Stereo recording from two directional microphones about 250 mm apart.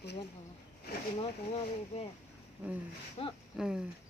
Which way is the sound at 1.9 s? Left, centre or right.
Left.